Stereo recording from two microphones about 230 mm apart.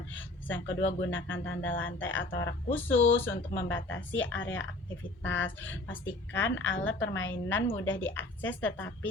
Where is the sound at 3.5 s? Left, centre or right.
Left.